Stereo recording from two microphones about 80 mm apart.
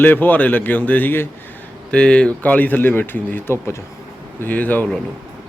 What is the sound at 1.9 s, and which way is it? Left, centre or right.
Speech, centre.